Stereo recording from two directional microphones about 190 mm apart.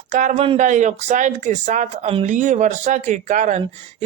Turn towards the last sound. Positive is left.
turn(degrees=-40)  # may be behind; listen again after turning